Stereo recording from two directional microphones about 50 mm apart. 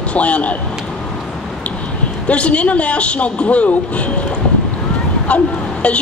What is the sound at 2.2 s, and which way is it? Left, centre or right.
Speech, left.